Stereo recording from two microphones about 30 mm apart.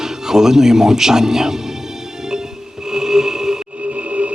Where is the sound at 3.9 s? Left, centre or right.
Right.